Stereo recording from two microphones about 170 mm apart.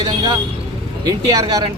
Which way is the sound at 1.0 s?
20° right (ahead or behind).